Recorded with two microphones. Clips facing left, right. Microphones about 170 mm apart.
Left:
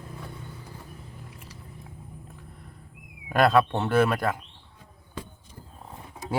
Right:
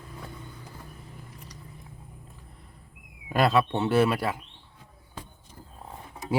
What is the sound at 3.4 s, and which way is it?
Speech, centre (ahead or behind).